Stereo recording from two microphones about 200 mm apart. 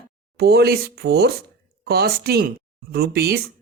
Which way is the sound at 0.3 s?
50° right (ahead or behind).